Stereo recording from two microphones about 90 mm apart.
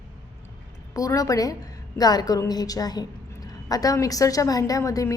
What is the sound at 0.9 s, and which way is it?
A woman's voice, 40° left (ahead or behind).